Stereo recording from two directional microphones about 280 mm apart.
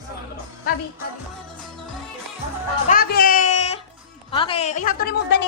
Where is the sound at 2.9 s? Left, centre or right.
Left.